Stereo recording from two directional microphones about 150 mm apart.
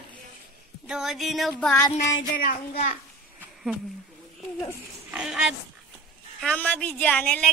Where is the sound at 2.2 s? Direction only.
75° left (ahead or behind).